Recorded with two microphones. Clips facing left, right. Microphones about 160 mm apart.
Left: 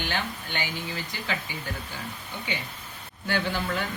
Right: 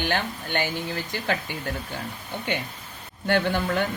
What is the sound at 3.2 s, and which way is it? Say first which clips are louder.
Speech: right 5 dB; 55° right (ahead or behind).